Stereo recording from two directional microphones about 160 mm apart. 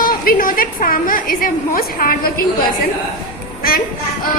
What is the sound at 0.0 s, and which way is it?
A woman's voice, 65° left (ahead or behind).